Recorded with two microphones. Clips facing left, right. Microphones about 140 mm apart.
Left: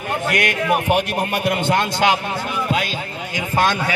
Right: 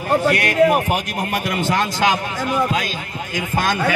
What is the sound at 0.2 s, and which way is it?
A man's voice, 35° right (ahead or behind).